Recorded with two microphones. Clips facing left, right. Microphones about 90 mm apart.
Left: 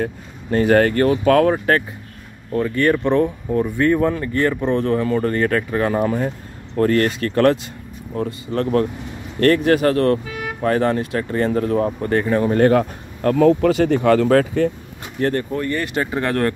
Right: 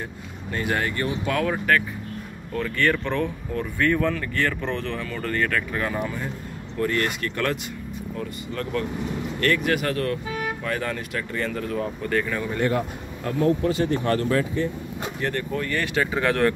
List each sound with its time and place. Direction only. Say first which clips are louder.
0.0 s speech: left 9 dB; 45° left (ahead or behind)
2.5 s speech: left 6 dB; 20° left (ahead or behind); by 12.5 s 40° left (ahead or behind)
12.5 s speech: left 8 dB; 60° left (ahead or behind); by 14.7 s 90° left
15.1 s speech: left 9 dB; 50° left (ahead or behind)
15.5 s speech: left 3 dB; 30° left (ahead or behind)